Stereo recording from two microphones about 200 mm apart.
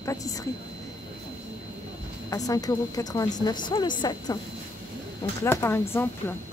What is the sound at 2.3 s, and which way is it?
A woman's voice, 15° left (ahead or behind).